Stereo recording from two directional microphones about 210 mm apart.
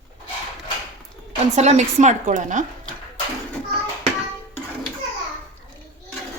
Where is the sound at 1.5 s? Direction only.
35° right (ahead or behind).